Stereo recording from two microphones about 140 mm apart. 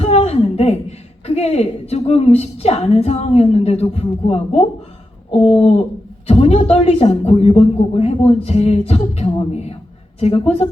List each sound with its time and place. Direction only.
0.0 s a woman's voice: 45° left (ahead or behind)